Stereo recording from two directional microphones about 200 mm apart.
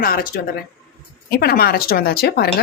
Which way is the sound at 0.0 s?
45° left (ahead or behind).